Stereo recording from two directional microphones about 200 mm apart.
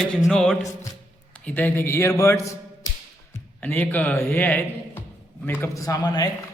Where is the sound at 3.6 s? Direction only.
10° left (ahead or behind).